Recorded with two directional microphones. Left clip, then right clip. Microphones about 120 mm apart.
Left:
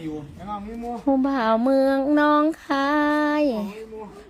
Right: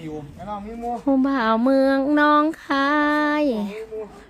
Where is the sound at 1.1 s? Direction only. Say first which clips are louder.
Even; 15° right (ahead or behind).